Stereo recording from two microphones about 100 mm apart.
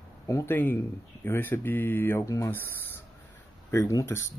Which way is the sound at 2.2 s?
30° left (ahead or behind).